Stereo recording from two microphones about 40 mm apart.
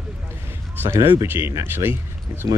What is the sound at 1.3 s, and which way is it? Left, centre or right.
Speech, right.